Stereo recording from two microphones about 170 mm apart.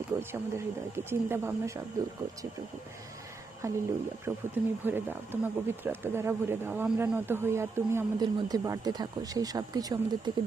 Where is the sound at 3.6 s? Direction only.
15° right (ahead or behind).